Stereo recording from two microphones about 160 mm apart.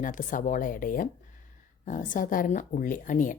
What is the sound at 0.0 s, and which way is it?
A woman's voice, 55° left (ahead or behind).